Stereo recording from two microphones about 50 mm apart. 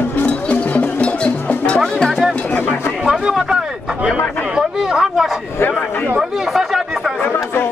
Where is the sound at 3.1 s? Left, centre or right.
Centre.